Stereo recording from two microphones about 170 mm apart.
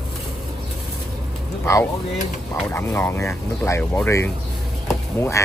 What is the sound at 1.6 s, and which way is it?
A man's voice, 15° left (ahead or behind).